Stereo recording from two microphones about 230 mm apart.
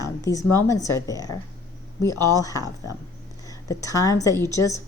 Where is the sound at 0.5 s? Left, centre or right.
Centre.